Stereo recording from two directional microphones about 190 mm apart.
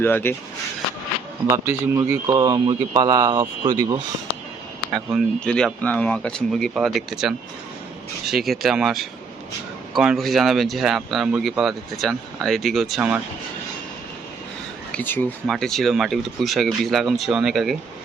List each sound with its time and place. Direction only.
0.0 s speech: 10° left (ahead or behind)
1.5 s speech: 15° right (ahead or behind)
4.9 s speech: centre (ahead or behind)
14.9 s speech: 10° left (ahead or behind)